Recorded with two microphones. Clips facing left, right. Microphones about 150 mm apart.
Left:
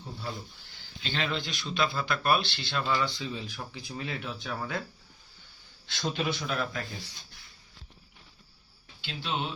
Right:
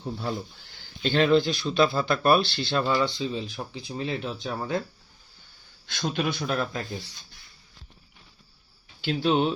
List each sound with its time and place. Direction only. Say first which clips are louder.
0.0 s speech: right 8 dB; 70° right (ahead or behind)
1.0 s speech: right 12 dB; 45° right (ahead or behind)
3.2 s speech: right 6 dB; 25° right (ahead or behind)
5.8 s a man's voice: right 3 dB; 55° right (ahead or behind)
9.0 s speech: right 11 dB; 45° right (ahead or behind)